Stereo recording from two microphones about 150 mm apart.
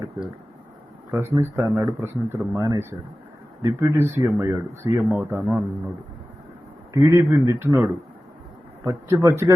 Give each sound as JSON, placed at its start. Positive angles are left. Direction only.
{"t": 1.1, "sound": "speech", "side_deg": -15}
{"t": 6.9, "sound": "a man's voice", "side_deg": -20}